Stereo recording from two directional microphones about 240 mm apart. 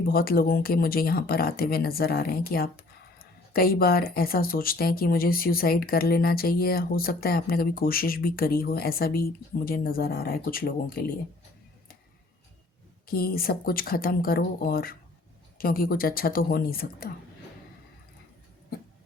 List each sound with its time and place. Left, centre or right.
0.0 s speech: left
13.1 s speech: left